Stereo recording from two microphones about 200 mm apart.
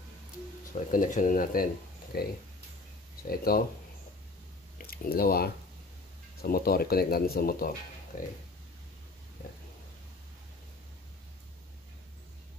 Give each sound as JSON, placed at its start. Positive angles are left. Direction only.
{"t": 0.7, "sound": "speech", "side_deg": 40}
{"t": 4.7, "sound": "speech", "side_deg": 50}